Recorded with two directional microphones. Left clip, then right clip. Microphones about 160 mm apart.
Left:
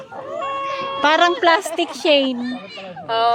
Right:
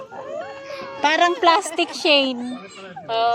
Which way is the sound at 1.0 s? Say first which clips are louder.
Left 2 dB; 10° left (ahead or behind).